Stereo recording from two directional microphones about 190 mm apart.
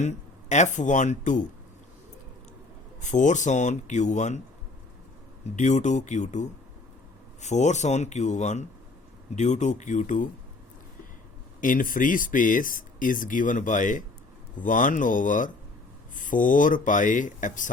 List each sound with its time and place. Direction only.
0.0 s speech: 40° left (ahead or behind)
3.0 s speech: 40° left (ahead or behind)
5.5 s speech: 40° left (ahead or behind)
11.6 s speech: 45° left (ahead or behind)